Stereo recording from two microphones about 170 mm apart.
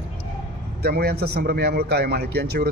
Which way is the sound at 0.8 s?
65° right (ahead or behind).